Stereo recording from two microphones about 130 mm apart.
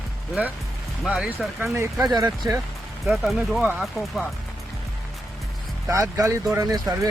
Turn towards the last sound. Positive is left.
turn(degrees=-25)  # may be behind; listen again after turning